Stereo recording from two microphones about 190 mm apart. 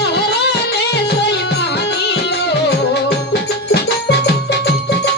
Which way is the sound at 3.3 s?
60° left (ahead or behind).